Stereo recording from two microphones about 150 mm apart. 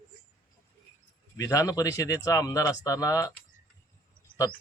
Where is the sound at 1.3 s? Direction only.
20° left (ahead or behind).